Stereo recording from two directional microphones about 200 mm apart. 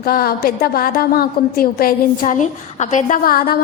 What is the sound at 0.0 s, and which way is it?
A woman's voice, 50° left (ahead or behind).